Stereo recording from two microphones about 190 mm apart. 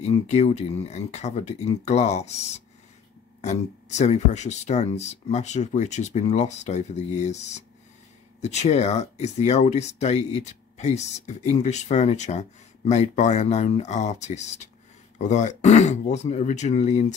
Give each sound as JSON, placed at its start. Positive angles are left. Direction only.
{"t": 0.0, "sound": "speech", "side_deg": 35}